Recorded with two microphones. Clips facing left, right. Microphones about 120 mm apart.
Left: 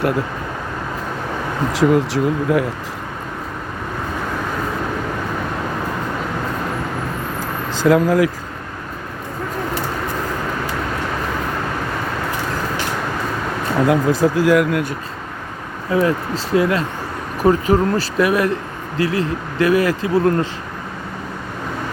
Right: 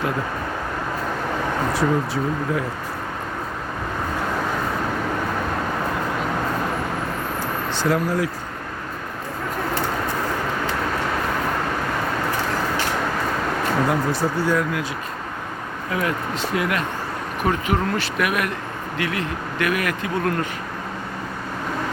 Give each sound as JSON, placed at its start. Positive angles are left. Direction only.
{"t": 1.7, "sound": "speech", "side_deg": 90}
{"t": 7.9, "sound": "speech", "side_deg": 90}
{"t": 13.8, "sound": "speech", "side_deg": 90}
{"t": 15.9, "sound": "speech", "side_deg": 30}